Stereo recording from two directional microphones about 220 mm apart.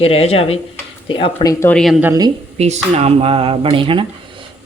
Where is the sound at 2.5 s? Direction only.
30° right (ahead or behind).